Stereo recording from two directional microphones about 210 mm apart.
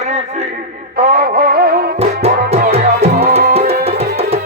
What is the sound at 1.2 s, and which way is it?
Music, 50° right (ahead or behind).